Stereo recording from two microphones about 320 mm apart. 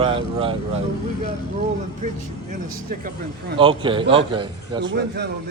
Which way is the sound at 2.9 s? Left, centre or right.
Right.